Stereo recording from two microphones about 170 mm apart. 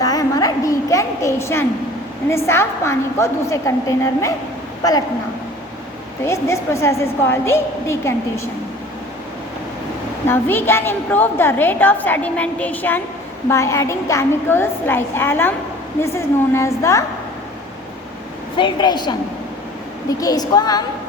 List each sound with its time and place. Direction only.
0.0 s a sound: 20° left (ahead or behind)
2.3 s a woman's voice: 15° left (ahead or behind)
6.2 s a woman's voice: 15° left (ahead or behind)
10.2 s a woman's voice: 15° left (ahead or behind)
18.5 s a woman's voice: 25° left (ahead or behind)